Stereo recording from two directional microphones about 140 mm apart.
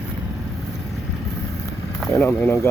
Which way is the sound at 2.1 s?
15° left (ahead or behind).